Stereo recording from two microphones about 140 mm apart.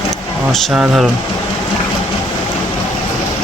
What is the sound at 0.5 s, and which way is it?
Speech, centre (ahead or behind).